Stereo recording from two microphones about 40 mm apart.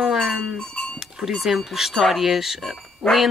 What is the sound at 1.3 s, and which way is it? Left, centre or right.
Speech, centre.